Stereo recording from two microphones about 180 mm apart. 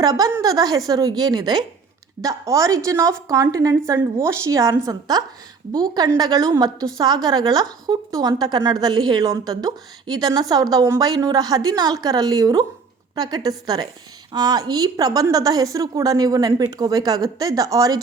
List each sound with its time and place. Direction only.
0.0 s a woman's voice: 20° right (ahead or behind)